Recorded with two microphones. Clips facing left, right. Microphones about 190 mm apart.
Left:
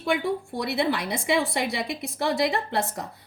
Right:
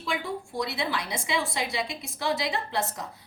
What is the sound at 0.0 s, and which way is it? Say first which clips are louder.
A woman's voice: left 6 dB; 60° left (ahead or behind).